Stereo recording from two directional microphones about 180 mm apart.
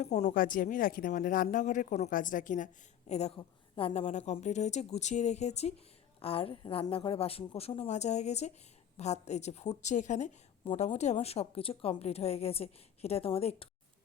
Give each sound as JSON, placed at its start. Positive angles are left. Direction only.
{"t": 0.0, "sound": "a woman's voice", "side_deg": 40}